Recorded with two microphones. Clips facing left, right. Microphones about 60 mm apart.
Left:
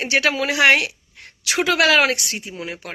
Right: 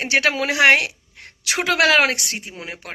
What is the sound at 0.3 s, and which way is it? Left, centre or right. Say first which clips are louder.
Speech: right 1 dB; right.